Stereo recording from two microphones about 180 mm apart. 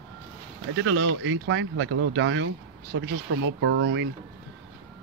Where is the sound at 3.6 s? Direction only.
90° right.